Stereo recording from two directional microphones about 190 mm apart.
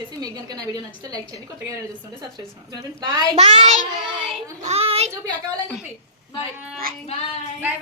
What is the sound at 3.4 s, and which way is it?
A woman's voice, 35° right (ahead or behind).